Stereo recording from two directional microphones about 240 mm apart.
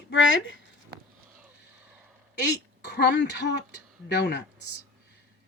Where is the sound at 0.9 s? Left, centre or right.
Right.